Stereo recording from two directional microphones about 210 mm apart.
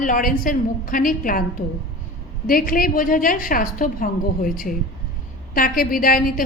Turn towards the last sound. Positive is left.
turn(degrees=40)  # may be behind; listen again after turning